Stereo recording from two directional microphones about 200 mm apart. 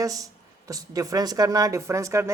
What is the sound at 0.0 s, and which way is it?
A man's voice, 15° right (ahead or behind).